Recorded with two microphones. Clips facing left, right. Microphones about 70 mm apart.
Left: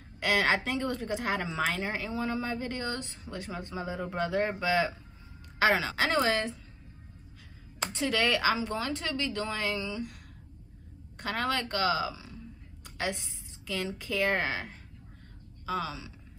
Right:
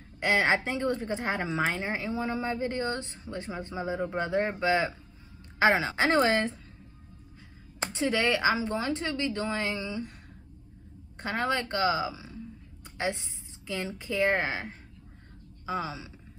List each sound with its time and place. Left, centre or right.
0.2 s a woman's voice: right
7.8 s a woman's voice: right
11.1 s a woman's voice: right